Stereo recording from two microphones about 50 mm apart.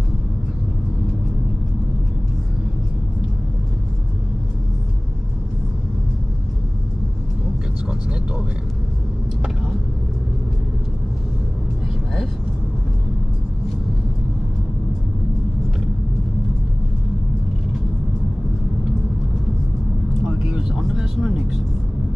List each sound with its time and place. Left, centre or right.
7.9 s vehicle: centre
20.2 s vehicle: centre